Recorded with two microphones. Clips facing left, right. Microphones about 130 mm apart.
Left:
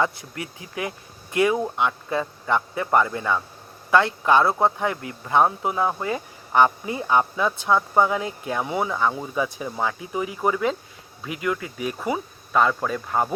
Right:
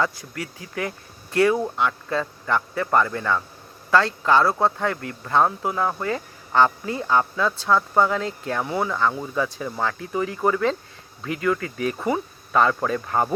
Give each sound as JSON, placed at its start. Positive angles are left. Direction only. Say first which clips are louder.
{"t": 0.0, "sound": "speech", "louder": "left 1 dB", "side_deg": 20}